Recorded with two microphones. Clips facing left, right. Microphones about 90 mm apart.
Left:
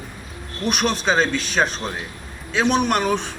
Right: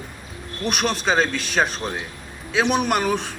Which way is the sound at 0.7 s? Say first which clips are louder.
Left 1 dB; centre (ahead or behind).